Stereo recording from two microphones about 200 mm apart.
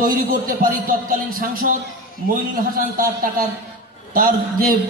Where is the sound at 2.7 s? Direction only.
45° right (ahead or behind).